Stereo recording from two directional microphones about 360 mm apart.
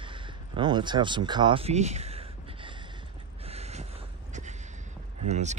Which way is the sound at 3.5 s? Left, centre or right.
Centre.